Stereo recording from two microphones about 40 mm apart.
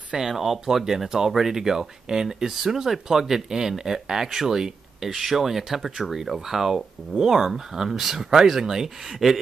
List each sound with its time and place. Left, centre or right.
0.3 s speech: centre